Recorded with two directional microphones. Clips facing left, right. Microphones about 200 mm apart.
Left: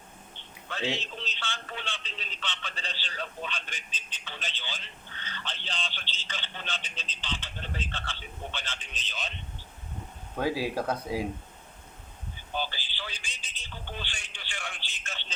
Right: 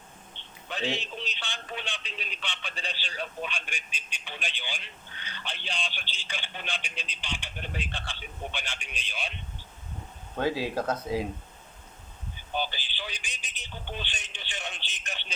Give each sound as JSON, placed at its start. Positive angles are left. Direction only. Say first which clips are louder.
{"t": 0.9, "sound": "speech", "louder": "right 1 dB", "side_deg": -15}
{"t": 10.3, "sound": "speech", "louder": "right 1 dB", "side_deg": 10}
{"t": 12.5, "sound": "speech", "louder": "right 2 dB", "side_deg": -15}